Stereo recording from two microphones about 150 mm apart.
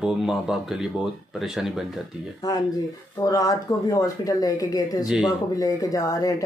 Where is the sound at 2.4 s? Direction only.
25° left (ahead or behind).